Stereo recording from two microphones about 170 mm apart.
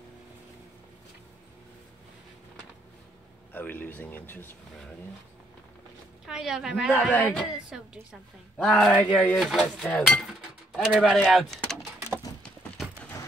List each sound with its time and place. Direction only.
3.5 s a man's voice: 10° left (ahead or behind)
6.2 s a woman's voice: 5° right (ahead or behind)
6.9 s a man's voice: 10° left (ahead or behind)
7.5 s speech: 5° right (ahead or behind)
12.4 s horse: centre (ahead or behind)